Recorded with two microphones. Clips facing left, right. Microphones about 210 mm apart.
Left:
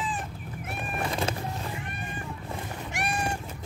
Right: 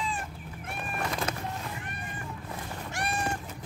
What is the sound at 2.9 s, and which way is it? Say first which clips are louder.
Cat: left 1 dB; 15° left (ahead or behind).